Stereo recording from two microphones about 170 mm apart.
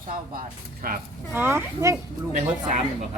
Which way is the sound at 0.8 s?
55° right (ahead or behind).